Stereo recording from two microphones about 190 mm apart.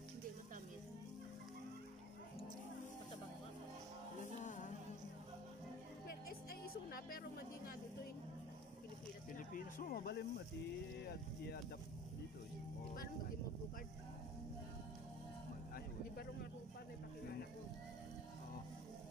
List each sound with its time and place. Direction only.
4.2 s music: 40° left (ahead or behind)
6.0 s music: 50° left (ahead or behind)
9.5 s speech: 45° left (ahead or behind)
15.7 s speech: 55° left (ahead or behind)